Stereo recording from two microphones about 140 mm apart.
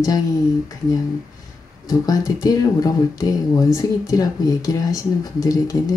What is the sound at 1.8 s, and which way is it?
Speech, 25° left (ahead or behind).